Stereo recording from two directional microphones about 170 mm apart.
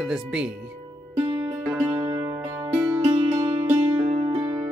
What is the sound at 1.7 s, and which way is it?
Music, 5° right (ahead or behind).